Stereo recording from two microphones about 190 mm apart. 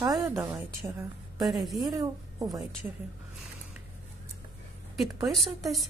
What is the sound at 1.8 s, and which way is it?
Speech, 20° right (ahead or behind).